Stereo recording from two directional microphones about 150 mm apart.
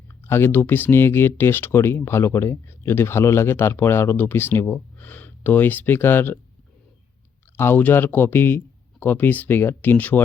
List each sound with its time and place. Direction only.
0.1 s speech: 15° left (ahead or behind)
7.5 s speech: 15° left (ahead or behind)